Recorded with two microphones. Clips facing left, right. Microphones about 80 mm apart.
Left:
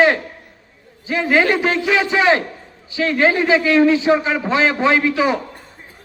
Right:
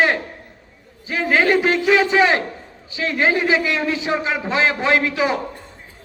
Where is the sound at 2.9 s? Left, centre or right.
Right.